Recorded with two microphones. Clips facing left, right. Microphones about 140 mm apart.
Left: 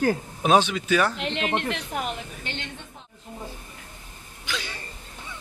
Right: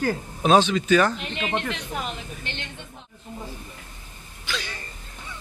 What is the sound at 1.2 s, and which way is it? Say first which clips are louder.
Speech: left 2 dB; 75° left (ahead or behind).